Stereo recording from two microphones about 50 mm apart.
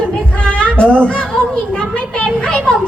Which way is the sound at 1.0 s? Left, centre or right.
Centre.